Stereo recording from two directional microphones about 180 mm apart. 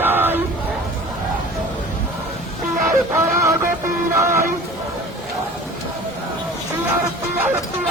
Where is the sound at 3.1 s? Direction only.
15° right (ahead or behind).